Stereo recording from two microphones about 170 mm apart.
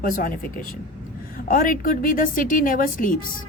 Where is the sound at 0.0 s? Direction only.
55° left (ahead or behind).